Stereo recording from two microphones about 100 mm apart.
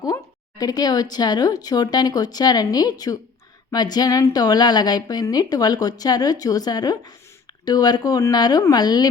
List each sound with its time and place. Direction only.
0.6 s speech: 40° left (ahead or behind)